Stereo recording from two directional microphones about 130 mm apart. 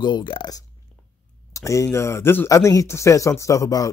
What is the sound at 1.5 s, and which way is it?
Speech, 25° left (ahead or behind).